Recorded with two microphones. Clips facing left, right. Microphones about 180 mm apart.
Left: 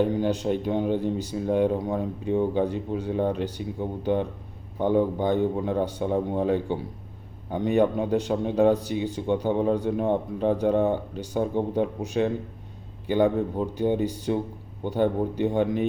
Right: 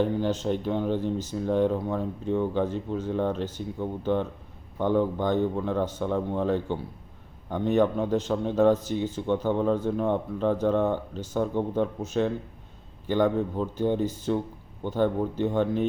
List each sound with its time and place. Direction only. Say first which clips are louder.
0.0 s speech: left 2 dB; 15° left (ahead or behind)